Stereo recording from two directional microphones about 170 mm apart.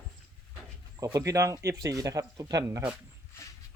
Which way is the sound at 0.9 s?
20° right (ahead or behind).